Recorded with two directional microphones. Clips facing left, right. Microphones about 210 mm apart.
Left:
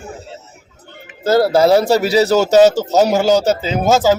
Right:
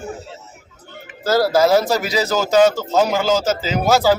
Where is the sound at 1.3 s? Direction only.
25° left (ahead or behind).